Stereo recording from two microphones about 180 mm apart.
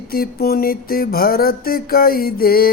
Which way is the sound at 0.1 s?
60° left (ahead or behind).